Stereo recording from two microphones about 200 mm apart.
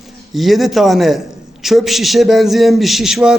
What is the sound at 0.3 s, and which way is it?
A man's voice, centre (ahead or behind).